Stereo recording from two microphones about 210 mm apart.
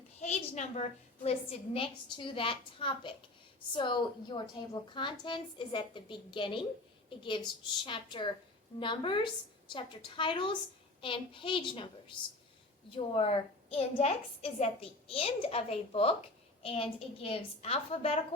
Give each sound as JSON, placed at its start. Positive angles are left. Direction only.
{"t": 0.2, "sound": "a woman's voice", "side_deg": 35}
{"t": 13.1, "sound": "a woman's voice", "side_deg": 25}